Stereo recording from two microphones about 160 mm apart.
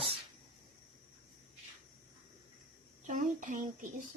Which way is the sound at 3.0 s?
55° right (ahead or behind).